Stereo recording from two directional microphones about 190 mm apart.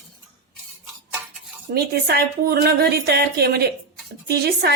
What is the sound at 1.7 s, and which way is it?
A woman's voice, 55° right (ahead or behind).